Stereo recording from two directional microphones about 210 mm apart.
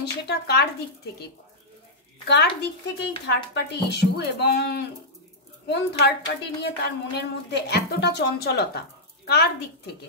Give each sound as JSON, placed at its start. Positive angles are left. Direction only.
{"t": 0.0, "sound": "speech", "side_deg": 50}
{"t": 2.2, "sound": "a woman's voice", "side_deg": 55}